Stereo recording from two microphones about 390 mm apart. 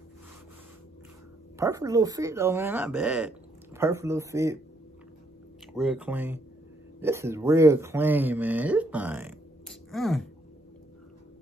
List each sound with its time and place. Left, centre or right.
1.6 s speech: centre
5.7 s speech: centre